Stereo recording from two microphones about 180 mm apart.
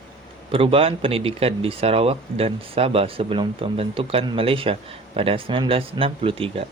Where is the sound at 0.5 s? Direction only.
30° right (ahead or behind).